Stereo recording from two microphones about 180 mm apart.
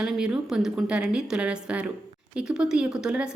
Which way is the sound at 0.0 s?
5° right (ahead or behind).